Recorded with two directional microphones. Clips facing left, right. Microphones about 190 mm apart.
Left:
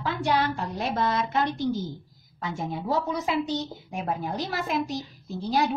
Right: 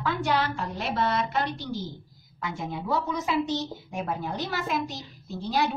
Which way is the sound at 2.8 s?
30° left (ahead or behind).